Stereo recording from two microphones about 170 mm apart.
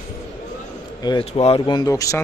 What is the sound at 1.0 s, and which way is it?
Speech, 30° left (ahead or behind).